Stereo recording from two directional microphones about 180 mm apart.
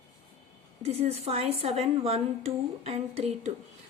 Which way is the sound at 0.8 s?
35° right (ahead or behind).